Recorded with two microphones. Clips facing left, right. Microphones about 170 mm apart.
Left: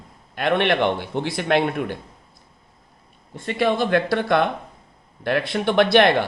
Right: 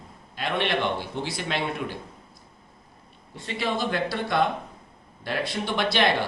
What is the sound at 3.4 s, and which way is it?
Speech, 55° left (ahead or behind).